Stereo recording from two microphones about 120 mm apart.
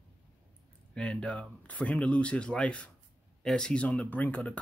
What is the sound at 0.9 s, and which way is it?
Speech, 10° left (ahead or behind).